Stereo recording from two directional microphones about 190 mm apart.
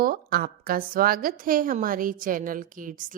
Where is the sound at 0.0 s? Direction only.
50° right (ahead or behind).